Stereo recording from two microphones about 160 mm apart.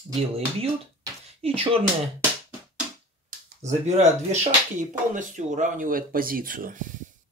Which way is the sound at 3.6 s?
45° right (ahead or behind).